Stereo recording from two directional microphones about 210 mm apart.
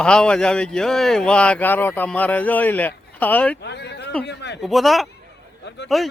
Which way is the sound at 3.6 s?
55° left (ahead or behind).